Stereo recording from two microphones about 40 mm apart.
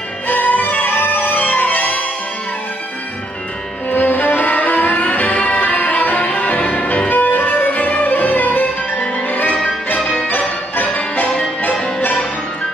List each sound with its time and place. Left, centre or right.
0.3 s music: left
3.9 s music: left
9.9 s music: left